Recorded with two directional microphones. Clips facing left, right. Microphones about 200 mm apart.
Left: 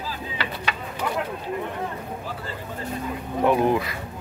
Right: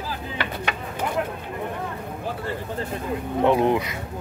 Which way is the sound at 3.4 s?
25° right (ahead or behind).